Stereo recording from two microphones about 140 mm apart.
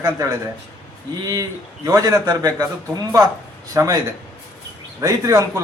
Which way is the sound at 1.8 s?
25° right (ahead or behind).